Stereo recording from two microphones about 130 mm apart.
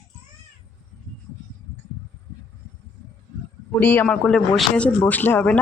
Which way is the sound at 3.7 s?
15° left (ahead or behind).